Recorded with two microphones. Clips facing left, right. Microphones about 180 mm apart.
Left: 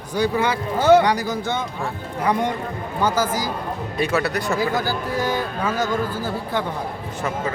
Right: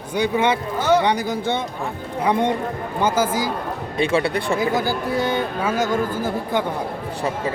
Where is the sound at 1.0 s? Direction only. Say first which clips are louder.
Right 1 dB; 25° right (ahead or behind).